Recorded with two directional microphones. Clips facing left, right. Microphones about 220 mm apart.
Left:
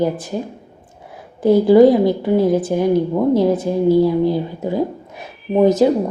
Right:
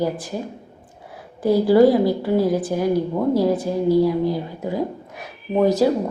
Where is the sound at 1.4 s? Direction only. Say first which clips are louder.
Left 4 dB; 20° left (ahead or behind).